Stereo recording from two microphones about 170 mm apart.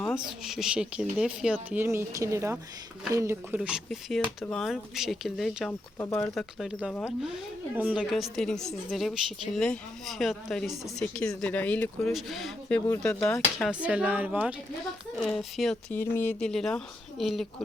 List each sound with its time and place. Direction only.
0.3 s speech: centre (ahead or behind)
6.0 s speech: 20° left (ahead or behind)
6.3 s speech: 5° right (ahead or behind); by 13.4 s 15° left (ahead or behind)
13.6 s speech: 5° right (ahead or behind)